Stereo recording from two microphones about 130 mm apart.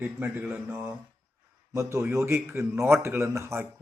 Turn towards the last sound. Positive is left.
turn(degrees=-20)  # may be behind; listen again after turning